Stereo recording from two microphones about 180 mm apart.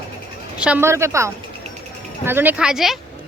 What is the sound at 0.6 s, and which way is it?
A woman's voice, 10° right (ahead or behind).